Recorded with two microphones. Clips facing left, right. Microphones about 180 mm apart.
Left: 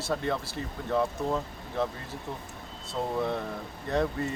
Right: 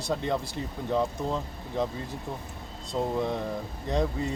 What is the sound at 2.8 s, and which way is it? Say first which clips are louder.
A man's voice: right 2 dB; 15° right (ahead or behind).